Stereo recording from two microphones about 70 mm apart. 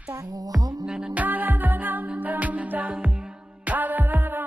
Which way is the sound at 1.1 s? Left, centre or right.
Right.